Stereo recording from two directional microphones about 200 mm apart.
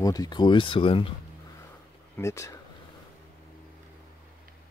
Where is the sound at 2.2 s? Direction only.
15° left (ahead or behind).